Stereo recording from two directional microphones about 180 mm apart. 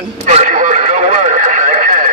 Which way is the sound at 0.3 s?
40° right (ahead or behind).